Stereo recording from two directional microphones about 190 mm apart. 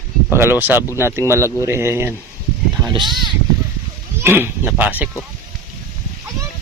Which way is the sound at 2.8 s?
25° right (ahead or behind).